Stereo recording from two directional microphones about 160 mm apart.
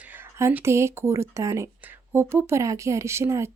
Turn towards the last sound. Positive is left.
turn(degrees=-15)  # may be behind; listen again after turning